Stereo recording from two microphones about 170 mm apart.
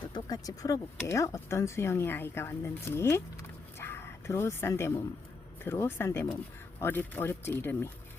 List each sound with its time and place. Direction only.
0.0 s speech: 25° left (ahead or behind)
3.8 s a sound: 15° left (ahead or behind)
5.6 s speech: 15° left (ahead or behind)